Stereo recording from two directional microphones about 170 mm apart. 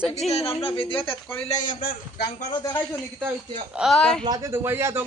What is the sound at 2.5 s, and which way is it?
Speech, 25° left (ahead or behind).